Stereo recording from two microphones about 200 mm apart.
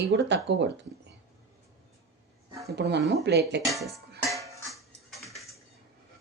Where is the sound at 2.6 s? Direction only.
55° right (ahead or behind).